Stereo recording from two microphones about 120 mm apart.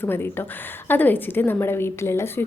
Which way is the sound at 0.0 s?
20° left (ahead or behind).